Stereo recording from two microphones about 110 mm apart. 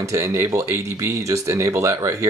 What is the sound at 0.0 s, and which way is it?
Speech, 30° right (ahead or behind).